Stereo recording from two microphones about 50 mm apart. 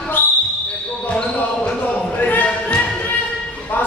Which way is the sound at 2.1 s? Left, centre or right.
Left.